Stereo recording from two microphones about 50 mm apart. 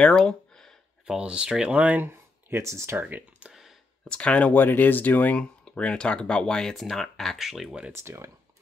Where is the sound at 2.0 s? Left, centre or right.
Right.